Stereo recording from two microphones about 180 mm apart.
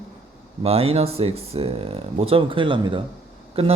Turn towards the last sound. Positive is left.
turn(degrees=-30)  # may be behind; listen again after turning